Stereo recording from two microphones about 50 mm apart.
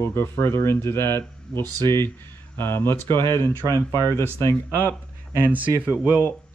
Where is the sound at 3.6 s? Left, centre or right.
Left.